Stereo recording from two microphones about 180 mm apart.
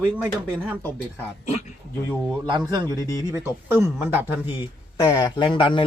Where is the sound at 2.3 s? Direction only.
25° right (ahead or behind).